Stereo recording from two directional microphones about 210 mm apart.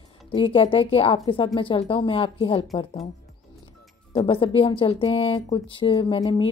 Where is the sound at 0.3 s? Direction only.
25° left (ahead or behind).